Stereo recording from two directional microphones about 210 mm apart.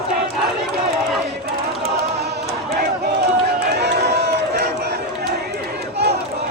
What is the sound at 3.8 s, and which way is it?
Run, 50° right (ahead or behind).